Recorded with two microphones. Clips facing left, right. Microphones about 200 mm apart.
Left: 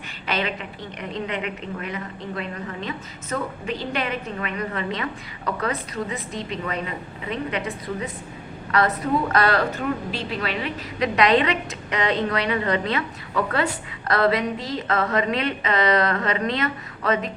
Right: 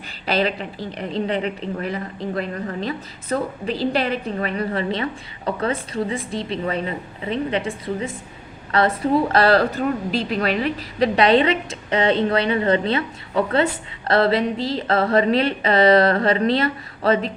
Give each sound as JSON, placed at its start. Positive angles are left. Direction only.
{"t": 0.3, "sound": "a woman's voice", "side_deg": -35}